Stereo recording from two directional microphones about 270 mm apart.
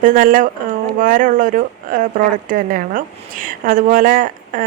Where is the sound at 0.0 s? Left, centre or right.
Right.